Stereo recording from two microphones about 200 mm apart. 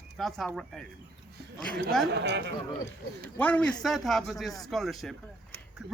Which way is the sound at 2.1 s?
55° right (ahead or behind).